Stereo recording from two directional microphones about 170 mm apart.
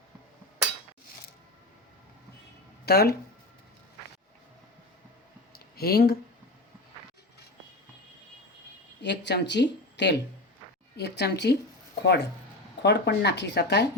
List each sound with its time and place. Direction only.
2.8 s speech: 70° left (ahead or behind)
5.5 s a sound: 65° left (ahead or behind)
9.0 s speech: 85° left